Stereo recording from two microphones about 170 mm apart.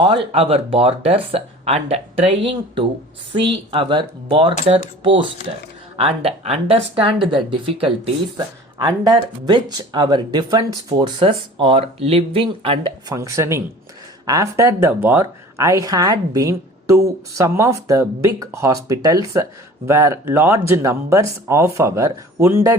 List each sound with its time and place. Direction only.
0.0 s speech: 35° right (ahead or behind)
8.8 s speech: 25° right (ahead or behind)